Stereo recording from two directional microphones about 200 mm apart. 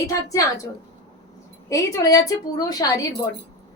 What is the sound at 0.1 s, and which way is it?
Speech, 15° left (ahead or behind).